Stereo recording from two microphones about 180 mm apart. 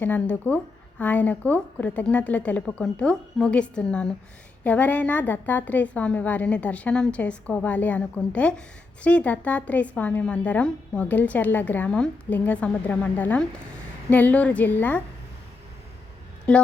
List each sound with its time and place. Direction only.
0.0 s a woman's voice: 10° left (ahead or behind)
16.5 s a woman's voice: 5° left (ahead or behind)